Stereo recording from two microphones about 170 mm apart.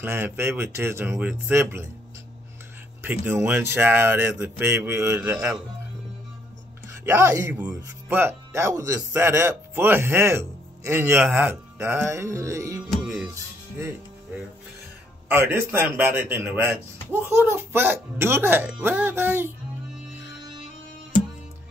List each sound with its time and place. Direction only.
0.0 s speech: 15° right (ahead or behind)
3.3 s speech: 15° right (ahead or behind)
7.1 s speech: 20° right (ahead or behind)
13.0 s music: 10° right (ahead or behind)
15.2 s speech: 10° right (ahead or behind)